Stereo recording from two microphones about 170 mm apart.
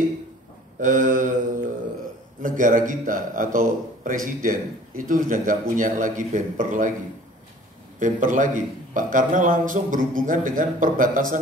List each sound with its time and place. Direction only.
0.7 s a man's voice: 50° right (ahead or behind)
2.4 s a man's voice: 50° right (ahead or behind)
8.0 s a man's voice: 50° right (ahead or behind)